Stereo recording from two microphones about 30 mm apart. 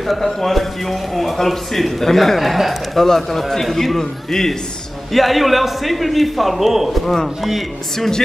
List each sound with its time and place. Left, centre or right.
0.0 s speech: centre
2.3 s a man's voice: centre
3.0 s speech: centre
5.1 s a man's voice: centre